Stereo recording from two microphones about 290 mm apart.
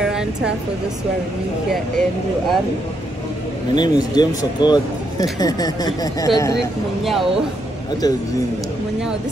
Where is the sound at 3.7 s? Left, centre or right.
Centre.